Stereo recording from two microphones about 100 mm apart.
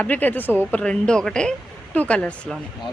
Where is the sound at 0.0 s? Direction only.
15° left (ahead or behind).